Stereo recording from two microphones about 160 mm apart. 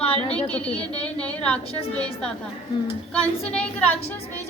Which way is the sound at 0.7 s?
40° left (ahead or behind).